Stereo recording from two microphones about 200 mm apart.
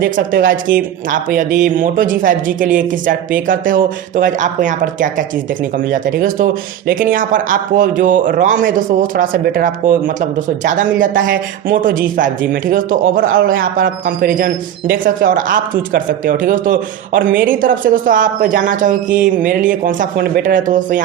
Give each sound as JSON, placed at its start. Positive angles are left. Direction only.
{"t": 0.0, "sound": "speech", "side_deg": -45}